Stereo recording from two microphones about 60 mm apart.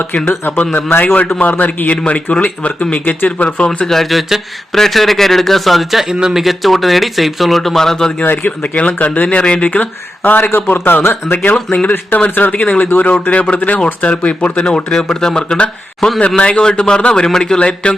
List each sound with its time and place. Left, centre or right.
0.6 s a man's voice: left
3.8 s speech: centre
8.4 s a man's voice: left